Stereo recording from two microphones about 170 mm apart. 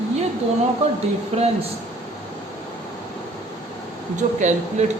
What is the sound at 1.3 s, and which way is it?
Speech, 35° right (ahead or behind).